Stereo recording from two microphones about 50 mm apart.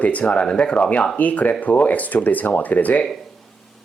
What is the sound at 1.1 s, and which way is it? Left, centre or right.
Speech, left.